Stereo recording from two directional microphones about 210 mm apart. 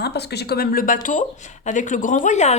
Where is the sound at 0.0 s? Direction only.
50° left (ahead or behind).